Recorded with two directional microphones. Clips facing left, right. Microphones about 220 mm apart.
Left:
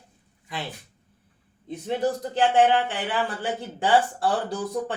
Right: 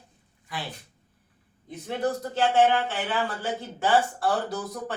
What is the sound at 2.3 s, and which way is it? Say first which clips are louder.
Speech: left 2 dB; 15° left (ahead or behind).